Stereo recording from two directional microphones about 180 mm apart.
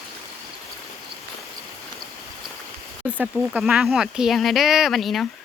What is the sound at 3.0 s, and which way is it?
Speech, 10° right (ahead or behind).